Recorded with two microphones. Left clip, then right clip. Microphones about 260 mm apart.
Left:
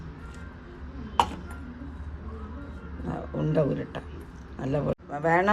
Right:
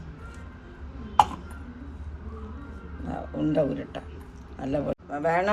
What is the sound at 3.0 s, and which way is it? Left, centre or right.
Oink, left.